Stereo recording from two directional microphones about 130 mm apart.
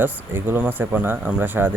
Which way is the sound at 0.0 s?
15° right (ahead or behind).